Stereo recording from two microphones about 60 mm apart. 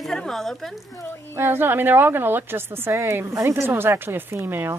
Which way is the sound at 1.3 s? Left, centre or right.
Right.